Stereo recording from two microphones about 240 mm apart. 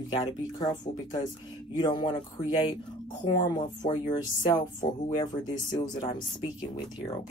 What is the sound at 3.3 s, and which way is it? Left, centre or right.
Speech, centre.